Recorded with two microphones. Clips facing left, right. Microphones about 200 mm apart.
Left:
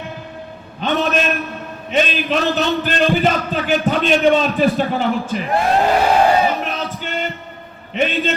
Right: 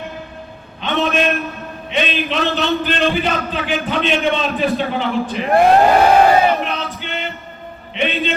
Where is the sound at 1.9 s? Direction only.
45° left (ahead or behind).